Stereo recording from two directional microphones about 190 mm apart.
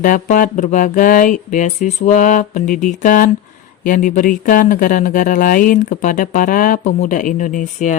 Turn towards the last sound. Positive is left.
turn(degrees=40)  # may be behind; listen again after turning